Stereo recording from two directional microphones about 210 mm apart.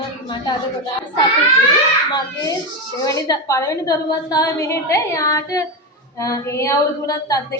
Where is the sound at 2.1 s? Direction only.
15° left (ahead or behind).